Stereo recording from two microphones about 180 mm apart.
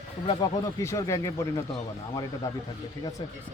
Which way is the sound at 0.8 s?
15° left (ahead or behind).